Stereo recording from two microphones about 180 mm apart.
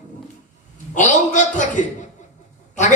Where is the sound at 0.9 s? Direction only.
45° left (ahead or behind).